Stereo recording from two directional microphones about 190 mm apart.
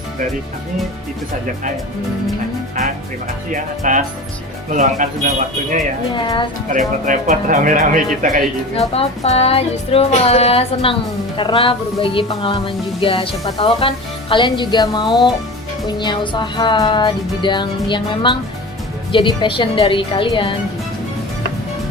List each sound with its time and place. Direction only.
3.5 s speech: 40° right (ahead or behind)
6.1 s speech: 25° left (ahead or behind)
6.7 s speech: 45° right (ahead or behind)
8.7 s music: 30° left (ahead or behind)
11.3 s speech: 25° left (ahead or behind)